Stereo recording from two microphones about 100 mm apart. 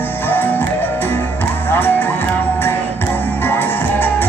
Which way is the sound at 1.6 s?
20° left (ahead or behind).